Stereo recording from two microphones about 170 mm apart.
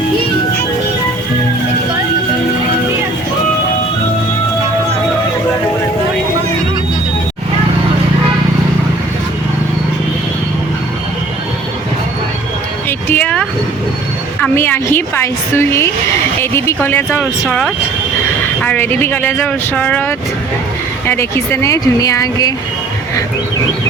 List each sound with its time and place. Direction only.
13.1 s vehicle: 10° left (ahead or behind)
14.4 s speech: 10° left (ahead or behind)